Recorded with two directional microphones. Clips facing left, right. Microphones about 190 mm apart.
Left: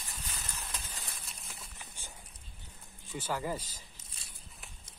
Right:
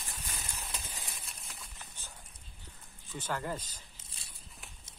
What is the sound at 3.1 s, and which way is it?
Speech, 10° left (ahead or behind).